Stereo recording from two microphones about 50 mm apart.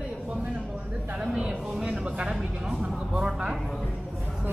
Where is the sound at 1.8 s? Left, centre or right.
Centre.